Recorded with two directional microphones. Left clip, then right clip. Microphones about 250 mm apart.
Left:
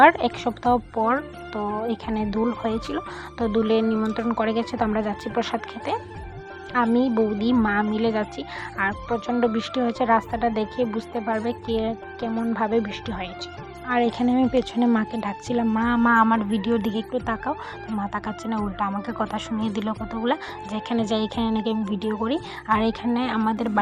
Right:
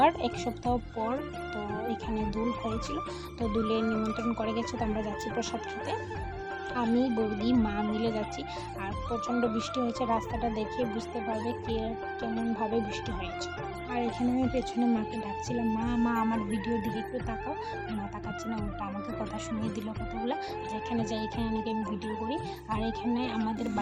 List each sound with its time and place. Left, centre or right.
0.0 s speech: centre
6.7 s speech: centre